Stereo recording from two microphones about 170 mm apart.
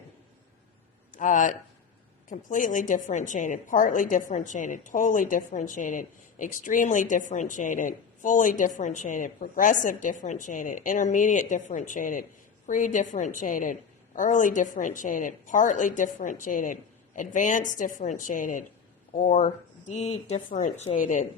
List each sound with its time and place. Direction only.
1.1 s a woman's voice: 50° left (ahead or behind)